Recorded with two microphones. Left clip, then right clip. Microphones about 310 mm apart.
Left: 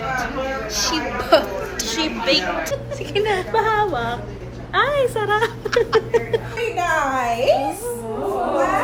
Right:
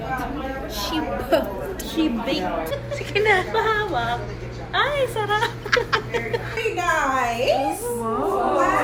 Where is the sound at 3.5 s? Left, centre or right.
Left.